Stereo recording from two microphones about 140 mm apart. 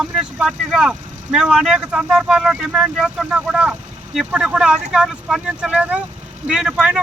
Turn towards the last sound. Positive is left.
turn(degrees=-5)  # may be behind; listen again after turning